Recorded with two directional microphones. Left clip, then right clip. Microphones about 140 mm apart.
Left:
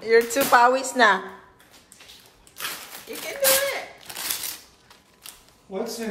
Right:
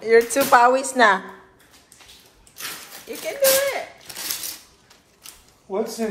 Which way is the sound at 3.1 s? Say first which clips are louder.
Right 4 dB; 5° left (ahead or behind).